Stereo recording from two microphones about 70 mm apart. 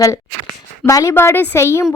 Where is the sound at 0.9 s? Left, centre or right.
Left.